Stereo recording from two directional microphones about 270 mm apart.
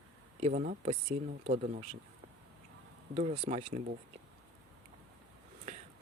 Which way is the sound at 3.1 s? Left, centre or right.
Right.